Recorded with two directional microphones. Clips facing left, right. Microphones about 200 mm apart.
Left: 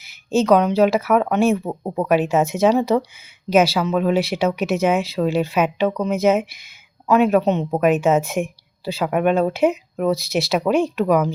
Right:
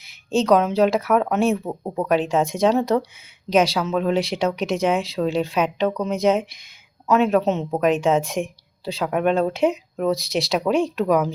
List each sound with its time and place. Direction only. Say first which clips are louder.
0.3 s speech: left 2 dB; centre (ahead or behind)